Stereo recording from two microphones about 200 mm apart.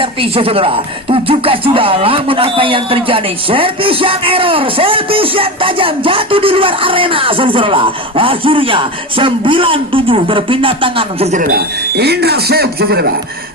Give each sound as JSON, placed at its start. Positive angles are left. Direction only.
{"t": 0.0, "sound": "speech", "side_deg": -25}